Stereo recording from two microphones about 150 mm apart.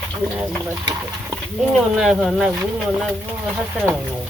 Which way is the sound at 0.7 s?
20° right (ahead or behind).